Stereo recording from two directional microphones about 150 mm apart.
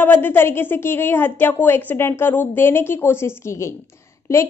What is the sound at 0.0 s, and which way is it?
Speech, 15° left (ahead or behind).